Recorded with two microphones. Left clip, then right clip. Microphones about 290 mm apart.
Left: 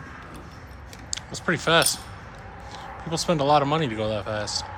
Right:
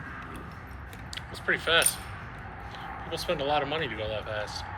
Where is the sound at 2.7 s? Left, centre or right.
Centre.